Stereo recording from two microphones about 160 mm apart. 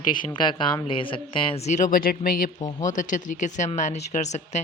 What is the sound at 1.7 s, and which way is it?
Speech, 50° left (ahead or behind).